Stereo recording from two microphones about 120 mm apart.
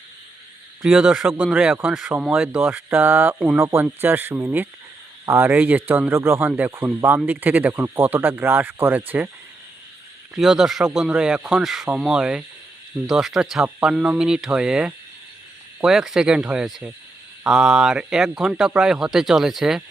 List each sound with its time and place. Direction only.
0.8 s speech: 10° right (ahead or behind)
1.9 s speech: centre (ahead or behind)
2.6 s speech: 20° right (ahead or behind)
3.6 s speech: 20° right (ahead or behind)
10.3 s speech: 5° right (ahead or behind)